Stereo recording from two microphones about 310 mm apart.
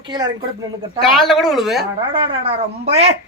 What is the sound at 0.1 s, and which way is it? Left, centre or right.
Speech, centre.